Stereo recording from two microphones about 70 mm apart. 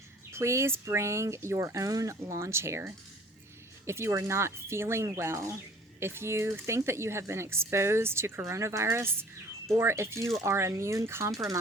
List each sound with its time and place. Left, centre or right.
0.3 s speech: right
11.3 s speech: right